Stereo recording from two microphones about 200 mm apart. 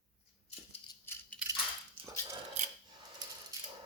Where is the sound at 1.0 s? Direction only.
10° left (ahead or behind).